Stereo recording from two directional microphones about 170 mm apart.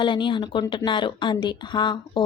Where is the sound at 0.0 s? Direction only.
30° left (ahead or behind).